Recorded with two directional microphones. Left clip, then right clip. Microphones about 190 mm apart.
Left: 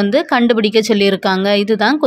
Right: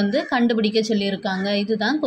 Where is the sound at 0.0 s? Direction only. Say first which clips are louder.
Left 7 dB; 30° left (ahead or behind).